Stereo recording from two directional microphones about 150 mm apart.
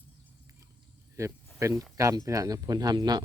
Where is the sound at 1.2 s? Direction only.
20° right (ahead or behind).